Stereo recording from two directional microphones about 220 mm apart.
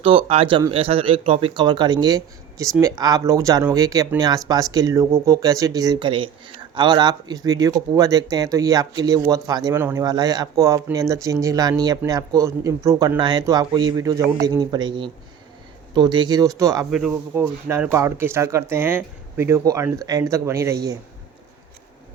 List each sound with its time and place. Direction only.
0.0 s speech: 25° right (ahead or behind)